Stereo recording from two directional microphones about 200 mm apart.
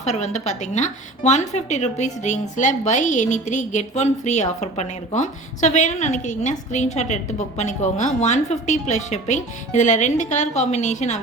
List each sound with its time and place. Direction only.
0.0 s a woman's voice: 35° left (ahead or behind)